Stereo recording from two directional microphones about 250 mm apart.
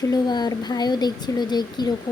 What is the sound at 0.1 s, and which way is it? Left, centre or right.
A woman's voice, centre.